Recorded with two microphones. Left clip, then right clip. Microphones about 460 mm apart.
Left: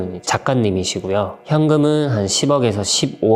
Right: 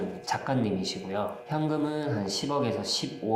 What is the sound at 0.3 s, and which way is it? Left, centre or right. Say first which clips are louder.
Speech: left 12 dB; left.